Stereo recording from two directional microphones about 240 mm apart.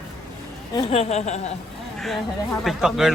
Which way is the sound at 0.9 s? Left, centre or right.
Left.